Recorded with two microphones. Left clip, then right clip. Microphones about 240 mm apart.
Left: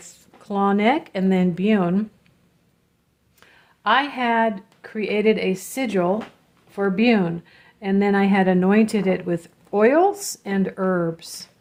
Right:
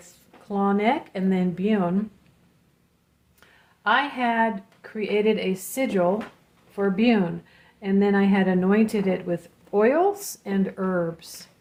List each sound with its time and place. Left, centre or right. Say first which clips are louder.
0.0 s a woman's voice: left 4 dB; left
3.4 s a woman's voice: left 2 dB; left